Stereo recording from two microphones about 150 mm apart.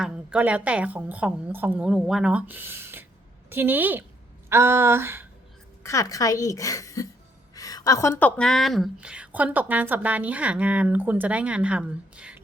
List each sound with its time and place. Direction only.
0.0 s a woman's voice: 10° right (ahead or behind)
4.4 s a sound: 15° right (ahead or behind)
5.8 s a woman's voice: 20° left (ahead or behind); by 12.4 s 10° right (ahead or behind)